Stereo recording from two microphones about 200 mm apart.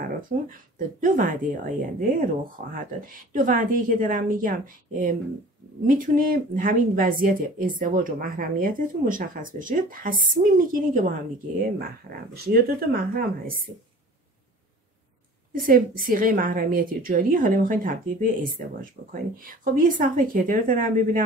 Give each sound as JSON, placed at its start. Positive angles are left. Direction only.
{"t": 0.0, "sound": "speech", "side_deg": -45}
{"t": 12.4, "sound": "speech", "side_deg": -50}
{"t": 15.5, "sound": "speech", "side_deg": -45}